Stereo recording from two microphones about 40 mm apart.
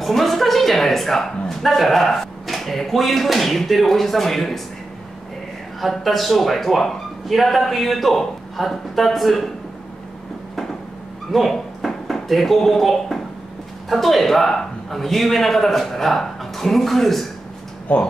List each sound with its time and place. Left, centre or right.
0.0 s a woman's voice: centre
5.8 s a woman's voice: centre
11.3 s a woman's voice: centre
17.9 s speech: left